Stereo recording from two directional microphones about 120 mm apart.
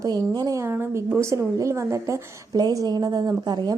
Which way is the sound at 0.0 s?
30° right (ahead or behind).